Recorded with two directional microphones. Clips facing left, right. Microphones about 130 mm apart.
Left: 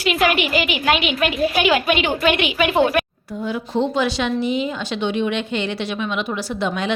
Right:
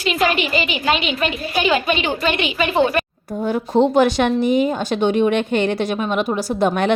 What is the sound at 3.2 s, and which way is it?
Speech, 45° right (ahead or behind).